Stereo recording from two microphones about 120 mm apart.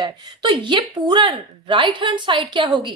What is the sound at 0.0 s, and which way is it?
A woman's voice, 40° right (ahead or behind).